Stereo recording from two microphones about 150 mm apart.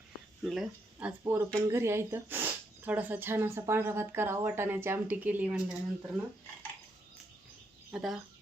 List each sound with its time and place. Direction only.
0.4 s speech: 5° right (ahead or behind)
7.9 s speech: centre (ahead or behind)